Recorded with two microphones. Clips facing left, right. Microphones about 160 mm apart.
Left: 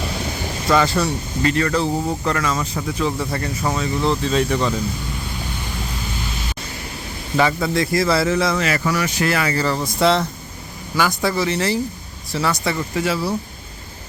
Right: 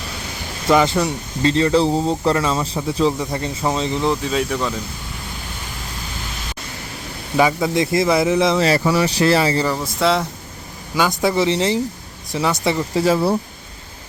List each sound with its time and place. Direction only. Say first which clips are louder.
0.7 s speech: right 2 dB; 15° right (ahead or behind); by 4.7 s centre (ahead or behind)
7.3 s speech: right 2 dB; 15° right (ahead or behind)
9.7 s speech: left 1 dB; 5° right (ahead or behind)
10.9 s speech: right 2 dB; 20° right (ahead or behind)